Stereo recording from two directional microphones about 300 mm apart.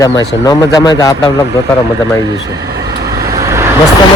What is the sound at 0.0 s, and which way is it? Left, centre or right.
Speech, centre.